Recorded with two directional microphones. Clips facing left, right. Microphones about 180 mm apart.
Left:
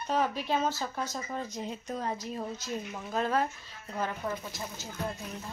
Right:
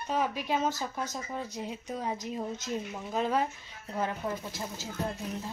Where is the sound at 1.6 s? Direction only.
5° right (ahead or behind).